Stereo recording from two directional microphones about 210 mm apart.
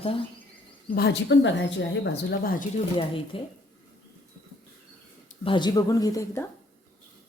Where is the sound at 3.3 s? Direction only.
25° left (ahead or behind).